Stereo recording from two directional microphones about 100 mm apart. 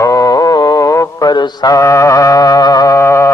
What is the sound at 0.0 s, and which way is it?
Mantra, 35° left (ahead or behind).